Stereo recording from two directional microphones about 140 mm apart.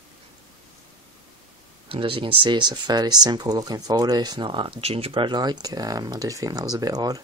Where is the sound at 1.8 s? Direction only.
40° right (ahead or behind).